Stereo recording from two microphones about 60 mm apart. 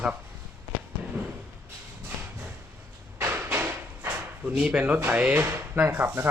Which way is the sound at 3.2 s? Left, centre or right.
Right.